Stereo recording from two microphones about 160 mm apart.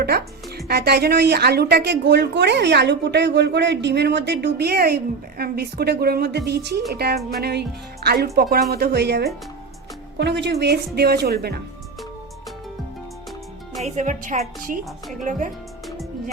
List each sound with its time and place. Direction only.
0.5 s speech: 85° right
13.8 s a woman's voice: 50° right (ahead or behind)